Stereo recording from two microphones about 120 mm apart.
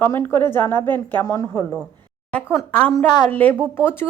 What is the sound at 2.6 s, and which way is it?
A woman's voice, 10° left (ahead or behind).